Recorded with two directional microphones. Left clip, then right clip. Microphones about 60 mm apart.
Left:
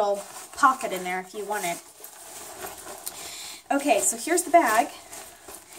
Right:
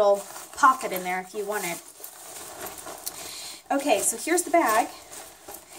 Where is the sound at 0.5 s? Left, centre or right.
Centre.